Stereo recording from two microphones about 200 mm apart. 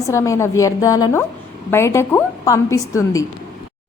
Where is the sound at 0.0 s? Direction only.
15° left (ahead or behind).